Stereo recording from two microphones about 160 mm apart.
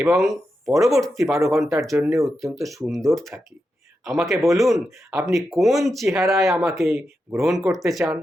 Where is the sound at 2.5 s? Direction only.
20° right (ahead or behind).